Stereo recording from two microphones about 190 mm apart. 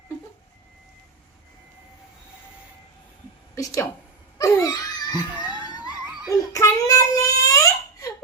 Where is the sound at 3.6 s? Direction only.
15° left (ahead or behind).